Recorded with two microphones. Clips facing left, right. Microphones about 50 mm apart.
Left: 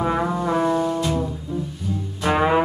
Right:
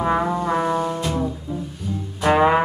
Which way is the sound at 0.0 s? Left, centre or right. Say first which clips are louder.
Right 1 dB; centre.